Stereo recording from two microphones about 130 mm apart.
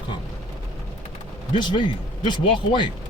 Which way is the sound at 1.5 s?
35° left (ahead or behind).